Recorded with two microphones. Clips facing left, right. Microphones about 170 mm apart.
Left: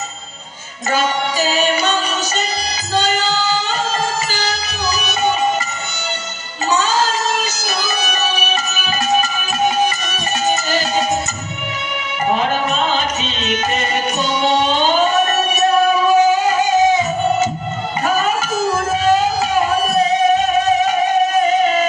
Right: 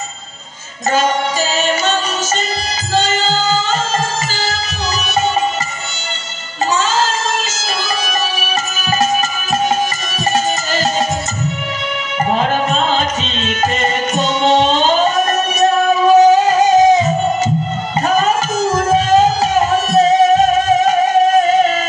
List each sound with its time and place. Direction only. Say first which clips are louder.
3.0 s music: right 1 dB; 45° right (ahead or behind)
10.3 s music: left 1 dB; 45° right (ahead or behind)
14.8 s music: right 1 dB; 45° right (ahead or behind)